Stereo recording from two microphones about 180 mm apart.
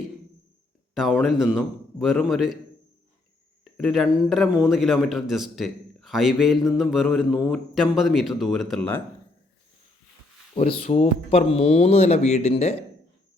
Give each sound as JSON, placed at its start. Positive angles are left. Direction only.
{"t": 0.9, "sound": "speech", "side_deg": 0}
{"t": 3.6, "sound": "speech", "side_deg": 0}
{"t": 10.5, "sound": "speech", "side_deg": 30}